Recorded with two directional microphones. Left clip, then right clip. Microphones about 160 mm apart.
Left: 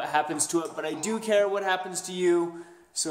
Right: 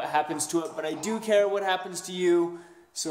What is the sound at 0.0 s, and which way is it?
Speech, centre (ahead or behind).